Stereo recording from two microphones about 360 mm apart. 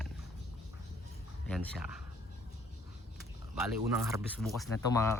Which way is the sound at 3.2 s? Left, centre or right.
Centre.